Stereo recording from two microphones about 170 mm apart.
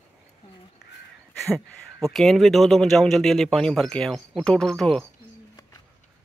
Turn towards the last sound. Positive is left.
turn(degrees=0)  # may be behind; listen again after turning